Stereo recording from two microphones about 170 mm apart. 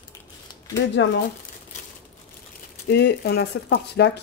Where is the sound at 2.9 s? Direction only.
75° left (ahead or behind).